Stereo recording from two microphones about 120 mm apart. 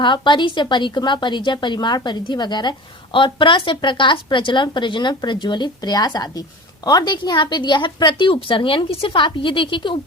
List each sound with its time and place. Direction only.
0.0 s a woman's voice: 40° left (ahead or behind)